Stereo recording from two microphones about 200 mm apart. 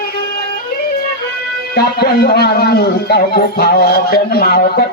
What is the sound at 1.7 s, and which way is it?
A man's voice, 50° left (ahead or behind).